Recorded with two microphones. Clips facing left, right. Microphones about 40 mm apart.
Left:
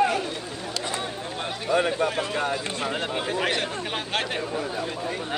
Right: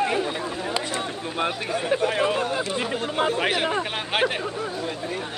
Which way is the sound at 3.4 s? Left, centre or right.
Centre.